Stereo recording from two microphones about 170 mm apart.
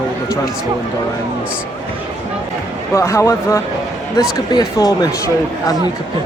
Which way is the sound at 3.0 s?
20° left (ahead or behind).